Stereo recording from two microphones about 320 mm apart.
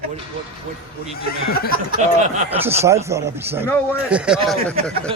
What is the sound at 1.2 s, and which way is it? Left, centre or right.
Speech, left.